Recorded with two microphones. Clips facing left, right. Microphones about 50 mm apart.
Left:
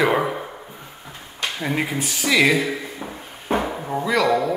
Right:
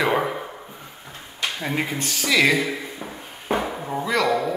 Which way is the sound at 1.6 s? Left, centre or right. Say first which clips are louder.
Left 3 dB; centre.